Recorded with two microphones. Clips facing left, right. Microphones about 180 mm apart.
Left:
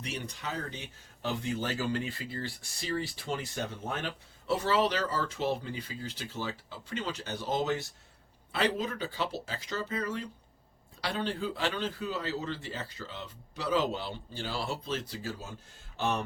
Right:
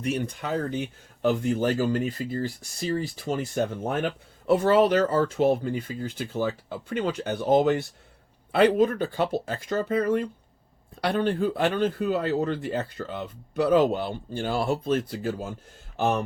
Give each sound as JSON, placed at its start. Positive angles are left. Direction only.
{"t": 0.0, "sound": "speech", "side_deg": -50}